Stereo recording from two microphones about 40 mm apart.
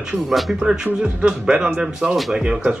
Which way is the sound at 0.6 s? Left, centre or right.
Centre.